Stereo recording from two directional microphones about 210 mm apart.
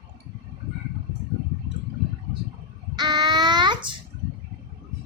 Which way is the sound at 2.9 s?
20° right (ahead or behind).